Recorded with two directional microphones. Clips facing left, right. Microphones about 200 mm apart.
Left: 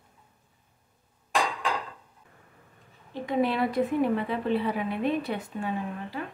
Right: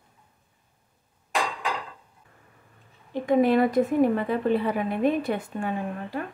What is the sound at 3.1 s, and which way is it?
A woman's voice, 50° right (ahead or behind).